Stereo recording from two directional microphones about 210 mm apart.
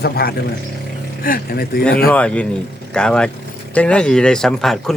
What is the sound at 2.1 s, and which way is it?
Speech, 5° left (ahead or behind).